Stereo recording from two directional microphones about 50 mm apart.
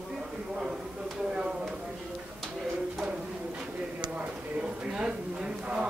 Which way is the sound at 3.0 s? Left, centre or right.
Right.